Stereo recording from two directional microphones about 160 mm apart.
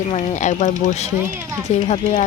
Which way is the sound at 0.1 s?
45° left (ahead or behind).